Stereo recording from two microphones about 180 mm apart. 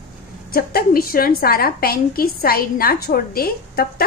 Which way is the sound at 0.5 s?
55° left (ahead or behind).